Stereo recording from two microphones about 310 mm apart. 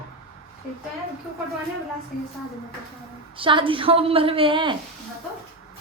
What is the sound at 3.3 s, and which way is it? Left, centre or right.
A woman's voice, centre.